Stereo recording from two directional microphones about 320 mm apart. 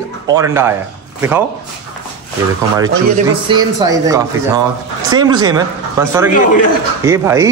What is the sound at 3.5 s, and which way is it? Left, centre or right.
Speech, centre.